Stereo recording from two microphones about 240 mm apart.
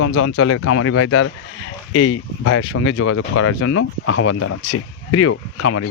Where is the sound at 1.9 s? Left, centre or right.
Left.